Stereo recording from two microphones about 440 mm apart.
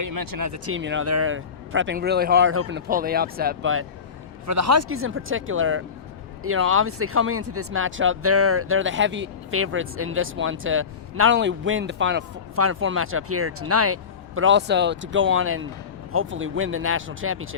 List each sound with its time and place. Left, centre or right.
0.0 s speech: right
4.4 s speech: right